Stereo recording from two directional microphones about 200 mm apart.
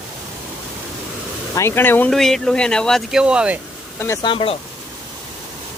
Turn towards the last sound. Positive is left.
turn(degrees=25)  # may be behind; listen again after turning